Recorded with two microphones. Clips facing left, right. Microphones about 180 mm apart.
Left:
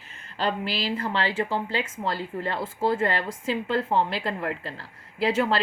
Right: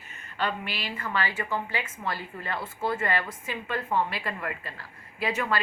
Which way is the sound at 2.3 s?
25° left (ahead or behind).